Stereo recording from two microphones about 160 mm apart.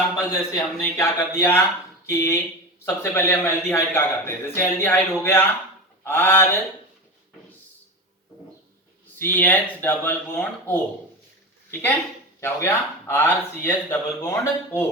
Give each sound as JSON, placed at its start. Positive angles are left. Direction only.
{"t": 0.3, "sound": "a man's voice", "side_deg": 20}
{"t": 9.1, "sound": "a man's voice", "side_deg": 10}